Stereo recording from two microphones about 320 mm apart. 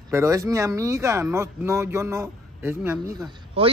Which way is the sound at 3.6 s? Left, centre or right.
Centre.